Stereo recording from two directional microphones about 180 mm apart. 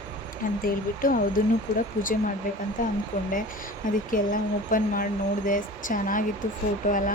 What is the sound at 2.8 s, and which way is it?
Speech, 50° left (ahead or behind).